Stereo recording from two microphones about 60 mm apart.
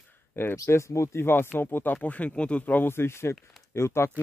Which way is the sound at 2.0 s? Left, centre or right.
Left.